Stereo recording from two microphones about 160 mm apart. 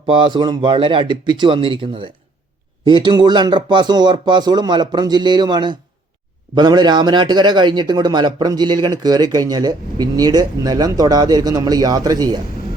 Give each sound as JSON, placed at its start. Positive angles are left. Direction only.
{"t": 0.1, "sound": "a man's voice", "side_deg": -30}